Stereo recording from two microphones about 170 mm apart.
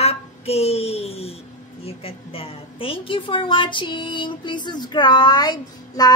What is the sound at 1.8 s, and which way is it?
A woman's voice, 35° left (ahead or behind).